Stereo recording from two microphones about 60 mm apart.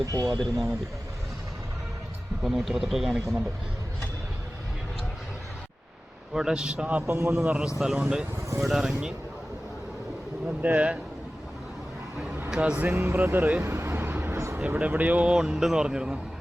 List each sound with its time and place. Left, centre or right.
0.0 s speech: right
0.3 s a man's voice: centre
2.4 s a man's voice: centre
6.3 s speech: centre
6.8 s a man's voice: right
10.6 s speech: right
12.5 s speech: centre
12.9 s speech: right
13.6 s vehicle: right
14.3 s a sound: right
14.8 s speech: right
15.3 s speech: centre